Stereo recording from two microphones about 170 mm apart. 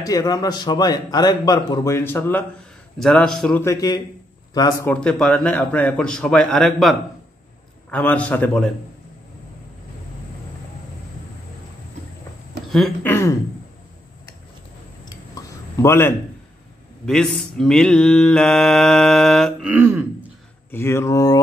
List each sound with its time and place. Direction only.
0.0 s a man's voice: 20° left (ahead or behind)
3.0 s mantra: 5° left (ahead or behind)
3.6 s a man's voice: 20° left (ahead or behind)
4.8 s a man's voice: 5° left (ahead or behind)
13.0 s a man's voice: 15° left (ahead or behind)
15.0 s a sound: 20° left (ahead or behind)
17.0 s mantra: centre (ahead or behind)
19.7 s throat clearing: 10° right (ahead or behind)
20.7 s a man's voice: 15° left (ahead or behind)